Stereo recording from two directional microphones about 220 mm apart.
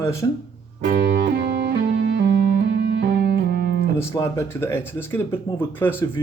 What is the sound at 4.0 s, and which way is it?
Speech, 10° left (ahead or behind).